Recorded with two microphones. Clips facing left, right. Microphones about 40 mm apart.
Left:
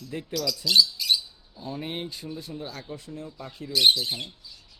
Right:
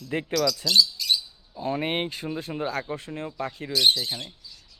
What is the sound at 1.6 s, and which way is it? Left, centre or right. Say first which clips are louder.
Speech: right 7 dB; right.